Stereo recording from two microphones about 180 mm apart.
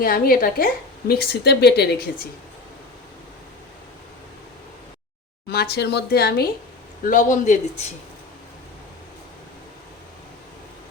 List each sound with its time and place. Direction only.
0.0 s a woman's voice: 50° left (ahead or behind)
5.5 s a woman's voice: 65° left (ahead or behind)
7.0 s a man's voice: 45° left (ahead or behind)